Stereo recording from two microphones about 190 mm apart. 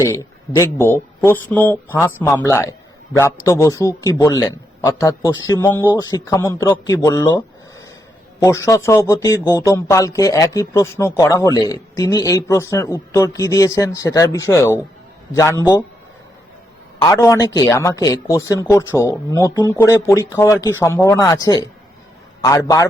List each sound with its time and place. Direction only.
0.0 s speech: 15° left (ahead or behind)
17.0 s speech: 20° left (ahead or behind)